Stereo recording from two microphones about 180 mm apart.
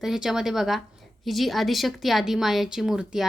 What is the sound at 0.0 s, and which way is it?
A woman's voice, centre (ahead or behind).